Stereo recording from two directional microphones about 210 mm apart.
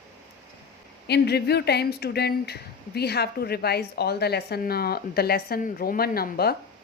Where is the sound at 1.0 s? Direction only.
50° left (ahead or behind).